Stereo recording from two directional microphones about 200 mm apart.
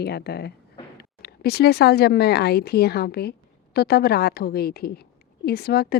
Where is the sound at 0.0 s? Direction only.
55° left (ahead or behind).